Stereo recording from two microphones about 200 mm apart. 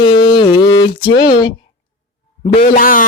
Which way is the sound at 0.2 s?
20° left (ahead or behind).